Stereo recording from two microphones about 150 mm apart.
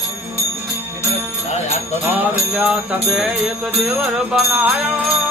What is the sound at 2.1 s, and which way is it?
Jingle bell, 10° right (ahead or behind).